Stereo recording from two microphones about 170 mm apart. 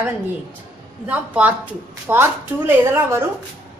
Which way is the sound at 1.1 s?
10° right (ahead or behind).